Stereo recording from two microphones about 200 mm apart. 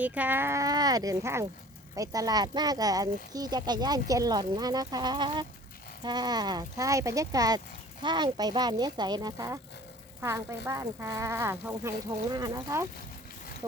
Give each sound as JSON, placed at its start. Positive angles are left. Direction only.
{"t": 0.0, "sound": "speech", "side_deg": -10}